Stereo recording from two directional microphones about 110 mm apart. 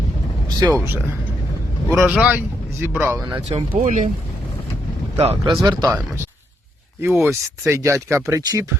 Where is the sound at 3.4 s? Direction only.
80° right.